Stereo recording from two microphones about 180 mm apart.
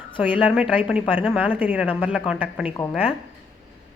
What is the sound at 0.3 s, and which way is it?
Speech, 5° right (ahead or behind).